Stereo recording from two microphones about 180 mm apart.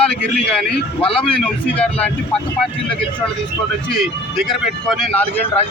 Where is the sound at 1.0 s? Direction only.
30° left (ahead or behind).